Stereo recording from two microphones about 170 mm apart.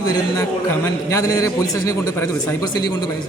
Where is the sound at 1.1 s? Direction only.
20° left (ahead or behind).